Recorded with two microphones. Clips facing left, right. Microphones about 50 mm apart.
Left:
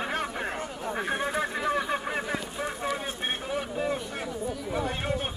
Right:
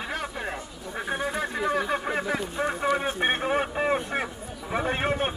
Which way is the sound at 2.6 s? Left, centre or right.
Right.